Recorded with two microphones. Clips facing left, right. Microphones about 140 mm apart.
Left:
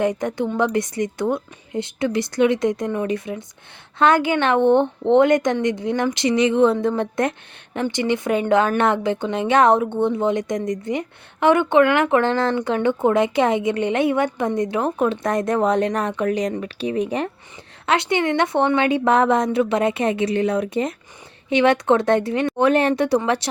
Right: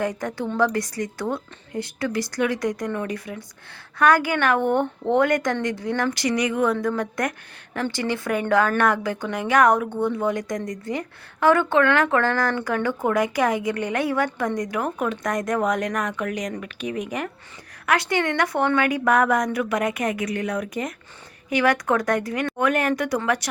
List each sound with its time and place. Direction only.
0.0 s speech: 20° left (ahead or behind)